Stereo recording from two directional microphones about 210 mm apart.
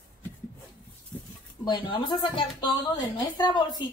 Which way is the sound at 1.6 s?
20° left (ahead or behind).